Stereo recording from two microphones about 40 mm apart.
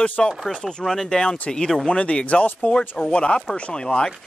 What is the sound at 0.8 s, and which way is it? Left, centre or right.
Speech, centre.